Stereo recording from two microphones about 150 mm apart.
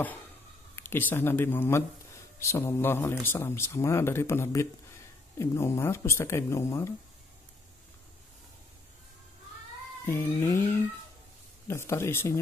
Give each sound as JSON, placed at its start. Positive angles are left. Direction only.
{"t": 0.7, "sound": "speech", "side_deg": 15}
{"t": 10.0, "sound": "speech", "side_deg": 15}